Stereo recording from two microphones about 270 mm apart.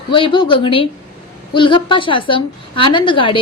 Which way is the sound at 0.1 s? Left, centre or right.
Centre.